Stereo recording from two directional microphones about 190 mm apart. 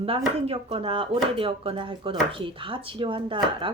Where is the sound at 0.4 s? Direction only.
30° right (ahead or behind).